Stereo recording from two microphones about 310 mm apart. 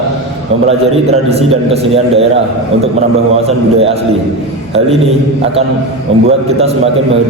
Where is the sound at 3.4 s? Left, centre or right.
Centre.